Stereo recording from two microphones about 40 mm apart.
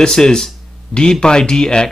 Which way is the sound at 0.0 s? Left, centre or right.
Centre.